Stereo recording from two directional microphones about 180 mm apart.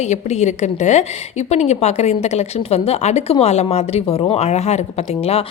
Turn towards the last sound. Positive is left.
turn(degrees=35)  # may be behind; listen again after turning